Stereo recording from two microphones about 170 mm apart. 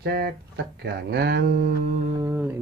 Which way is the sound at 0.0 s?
65° right (ahead or behind).